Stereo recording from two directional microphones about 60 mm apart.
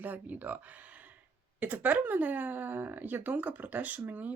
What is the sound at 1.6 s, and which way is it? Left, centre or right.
Speech, right.